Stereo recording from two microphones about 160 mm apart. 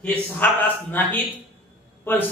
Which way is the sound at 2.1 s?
10° left (ahead or behind).